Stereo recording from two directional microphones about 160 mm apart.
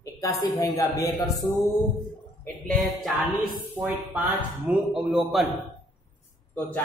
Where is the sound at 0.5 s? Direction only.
20° left (ahead or behind).